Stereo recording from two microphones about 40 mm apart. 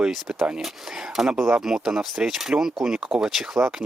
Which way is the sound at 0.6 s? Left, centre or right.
Centre.